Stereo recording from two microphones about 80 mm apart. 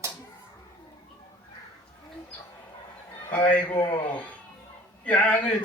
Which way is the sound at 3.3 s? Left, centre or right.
Centre.